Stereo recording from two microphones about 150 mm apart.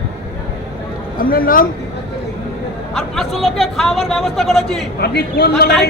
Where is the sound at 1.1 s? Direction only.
75° left (ahead or behind).